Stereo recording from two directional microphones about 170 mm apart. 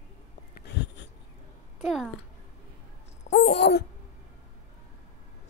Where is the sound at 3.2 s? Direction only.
40° left (ahead or behind).